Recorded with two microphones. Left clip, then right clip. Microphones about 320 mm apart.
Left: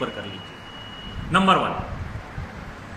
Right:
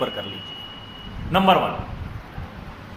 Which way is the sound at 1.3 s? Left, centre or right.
Centre.